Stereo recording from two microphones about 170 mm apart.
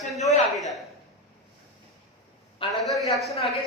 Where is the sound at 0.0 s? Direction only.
Centre (ahead or behind).